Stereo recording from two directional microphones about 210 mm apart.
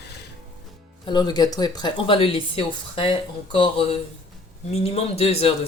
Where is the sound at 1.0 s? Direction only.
20° left (ahead or behind).